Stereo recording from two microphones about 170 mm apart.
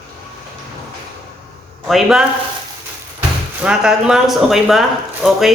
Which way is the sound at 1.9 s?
Centre (ahead or behind).